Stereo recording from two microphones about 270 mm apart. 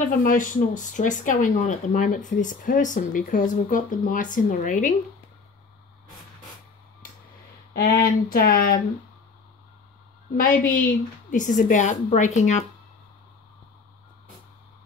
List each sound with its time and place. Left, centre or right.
0.2 s speech: left
7.7 s speech: left
10.3 s speech: left